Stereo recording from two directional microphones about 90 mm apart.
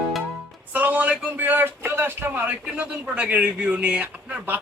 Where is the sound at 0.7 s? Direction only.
20° right (ahead or behind).